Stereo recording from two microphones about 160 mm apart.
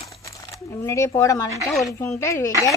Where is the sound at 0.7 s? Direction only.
20° left (ahead or behind).